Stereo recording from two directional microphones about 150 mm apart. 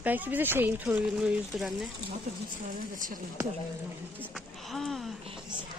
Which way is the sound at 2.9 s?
60° right (ahead or behind).